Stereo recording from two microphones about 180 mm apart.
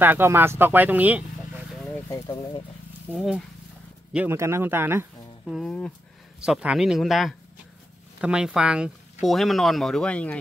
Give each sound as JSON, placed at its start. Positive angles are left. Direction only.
{"t": 0.0, "sound": "speech", "side_deg": -10}
{"t": 2.0, "sound": "speech", "side_deg": 20}
{"t": 4.1, "sound": "speech", "side_deg": -10}
{"t": 5.5, "sound": "speech", "side_deg": 5}